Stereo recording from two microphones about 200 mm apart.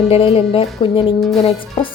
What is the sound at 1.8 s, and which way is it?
Speech, 25° left (ahead or behind).